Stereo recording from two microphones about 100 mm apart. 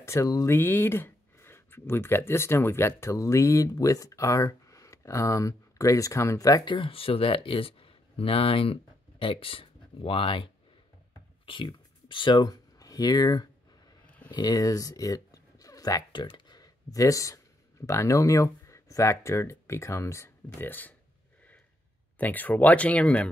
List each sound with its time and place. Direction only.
0.0 s speech: 30° left (ahead or behind)
0.6 s speech: 20° left (ahead or behind)
6.6 s speech: 55° left (ahead or behind); by 13.5 s 40° left (ahead or behind)
14.0 s a sound: 15° left (ahead or behind)
14.3 s speech: 40° left (ahead or behind); by 20.9 s 20° left (ahead or behind)
22.2 s speech: 20° left (ahead or behind)